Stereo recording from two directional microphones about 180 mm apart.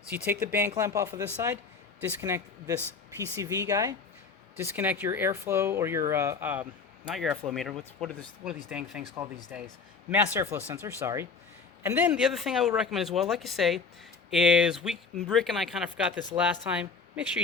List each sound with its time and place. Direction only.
0.1 s speech: 10° right (ahead or behind)